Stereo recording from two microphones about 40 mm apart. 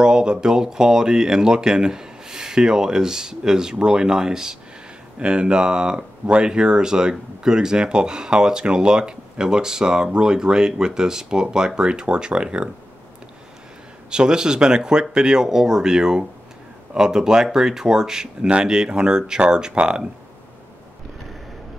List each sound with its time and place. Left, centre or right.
0.0 s speech: right
14.1 s speech: right